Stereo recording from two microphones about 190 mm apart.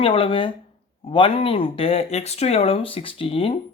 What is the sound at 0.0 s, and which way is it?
Speech, 30° left (ahead or behind).